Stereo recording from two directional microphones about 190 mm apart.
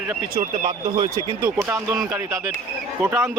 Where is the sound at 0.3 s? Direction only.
30° right (ahead or behind).